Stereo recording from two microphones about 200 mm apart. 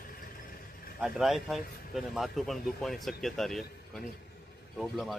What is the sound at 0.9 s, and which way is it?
Speech, centre (ahead or behind).